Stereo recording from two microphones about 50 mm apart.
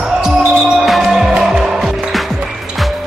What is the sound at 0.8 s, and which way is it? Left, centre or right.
Music, centre.